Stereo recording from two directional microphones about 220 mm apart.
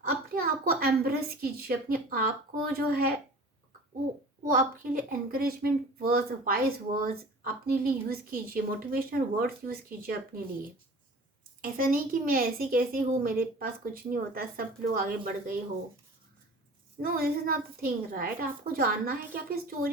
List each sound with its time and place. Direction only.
0.3 s a woman's voice: 45° right (ahead or behind)
4.4 s a woman's voice: 40° right (ahead or behind)
11.6 s a woman's voice: 40° right (ahead or behind)
17.0 s a woman's voice: 45° right (ahead or behind)